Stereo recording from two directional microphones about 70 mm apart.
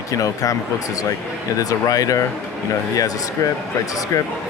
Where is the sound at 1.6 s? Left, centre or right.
Left.